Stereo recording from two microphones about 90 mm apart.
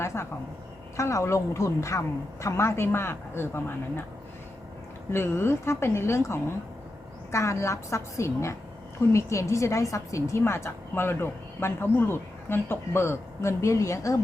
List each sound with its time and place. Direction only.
0.0 s a woman's voice: 30° left (ahead or behind)
5.1 s a woman's voice: 25° left (ahead or behind)